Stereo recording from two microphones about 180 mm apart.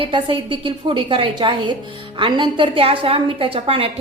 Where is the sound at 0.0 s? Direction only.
30° right (ahead or behind).